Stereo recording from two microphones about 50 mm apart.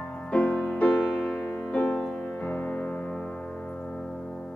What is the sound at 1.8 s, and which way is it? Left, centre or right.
Music, centre.